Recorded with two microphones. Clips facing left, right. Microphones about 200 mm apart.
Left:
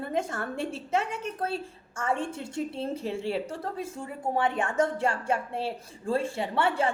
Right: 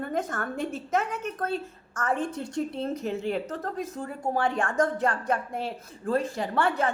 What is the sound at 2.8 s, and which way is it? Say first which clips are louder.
Speech: right 2 dB; 30° left (ahead or behind).